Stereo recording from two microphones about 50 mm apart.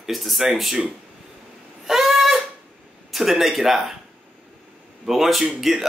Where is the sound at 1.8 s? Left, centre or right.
Centre.